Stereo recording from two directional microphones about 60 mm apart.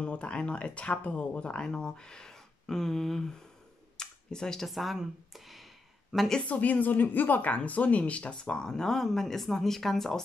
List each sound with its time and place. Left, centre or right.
0.0 s speech: centre
3.9 s a sound: centre
4.6 s speech: centre
6.4 s speech: left; by 10.2 s centre